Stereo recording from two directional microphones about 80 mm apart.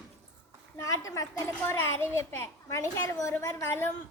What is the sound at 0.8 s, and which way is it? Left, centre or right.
Speech, left.